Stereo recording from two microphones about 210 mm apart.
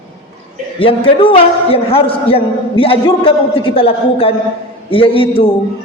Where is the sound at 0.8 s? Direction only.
25° left (ahead or behind).